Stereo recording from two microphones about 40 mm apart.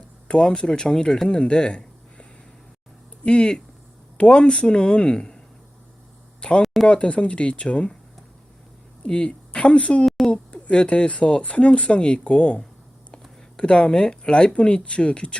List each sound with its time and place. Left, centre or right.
0.3 s speech: left
3.2 s speech: left
6.4 s a sound: left
6.8 s speech: left
9.0 s speech: left
10.2 s speech: left
13.6 s speech: left